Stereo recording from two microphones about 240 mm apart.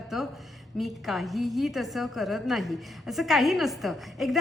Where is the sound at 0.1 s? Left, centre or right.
Centre.